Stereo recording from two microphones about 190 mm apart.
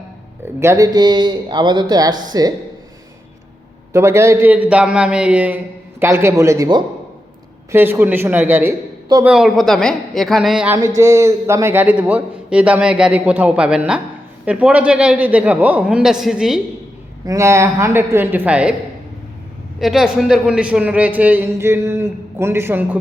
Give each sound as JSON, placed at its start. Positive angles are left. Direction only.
{"t": 0.6, "sound": "speech", "side_deg": -15}
{"t": 3.9, "sound": "a man's voice", "side_deg": -15}
{"t": 10.8, "sound": "a man's voice", "side_deg": -15}
{"t": 17.2, "sound": "a man's voice", "side_deg": -15}
{"t": 19.8, "sound": "a man's voice", "side_deg": 0}